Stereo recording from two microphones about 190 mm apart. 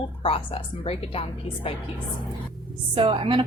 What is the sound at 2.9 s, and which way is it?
Speech, 25° right (ahead or behind).